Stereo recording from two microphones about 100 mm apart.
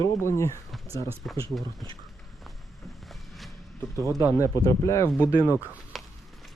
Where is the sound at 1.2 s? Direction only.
10° left (ahead or behind).